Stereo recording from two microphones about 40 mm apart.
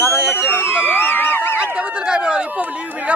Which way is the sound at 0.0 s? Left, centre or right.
Left.